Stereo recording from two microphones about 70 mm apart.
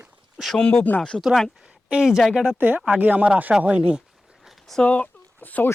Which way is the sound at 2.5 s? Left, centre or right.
Right.